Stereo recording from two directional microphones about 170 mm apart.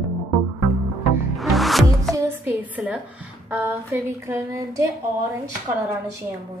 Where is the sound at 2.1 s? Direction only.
15° right (ahead or behind).